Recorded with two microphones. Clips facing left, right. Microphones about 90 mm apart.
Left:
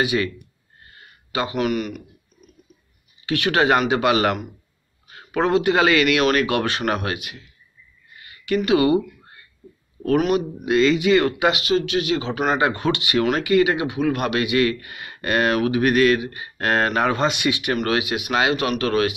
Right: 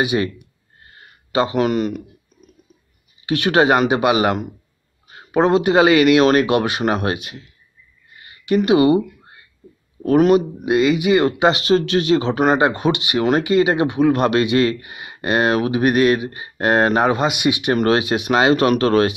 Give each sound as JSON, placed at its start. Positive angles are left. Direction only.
{"t": 0.0, "sound": "speech", "side_deg": -20}
{"t": 3.3, "sound": "speech", "side_deg": -25}
{"t": 8.2, "sound": "a sound", "side_deg": -30}
{"t": 10.1, "sound": "speech", "side_deg": -30}
{"t": 12.6, "sound": "speech", "side_deg": -20}
{"t": 17.7, "sound": "speech", "side_deg": -35}